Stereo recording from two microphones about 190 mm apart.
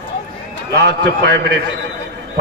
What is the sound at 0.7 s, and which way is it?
Speech, 65° right (ahead or behind).